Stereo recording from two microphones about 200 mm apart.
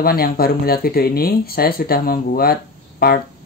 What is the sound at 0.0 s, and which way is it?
Speech, 50° left (ahead or behind).